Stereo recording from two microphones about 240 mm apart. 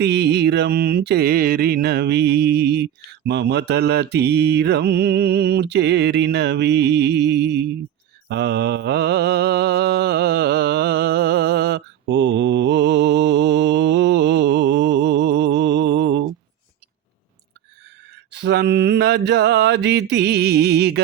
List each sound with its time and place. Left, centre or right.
0.0 s mantra: right
18.1 s mantra: right